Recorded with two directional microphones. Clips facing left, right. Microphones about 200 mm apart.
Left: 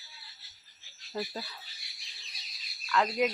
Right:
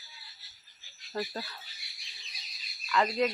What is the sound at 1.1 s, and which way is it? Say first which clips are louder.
Speech: right 1 dB; 5° left (ahead or behind).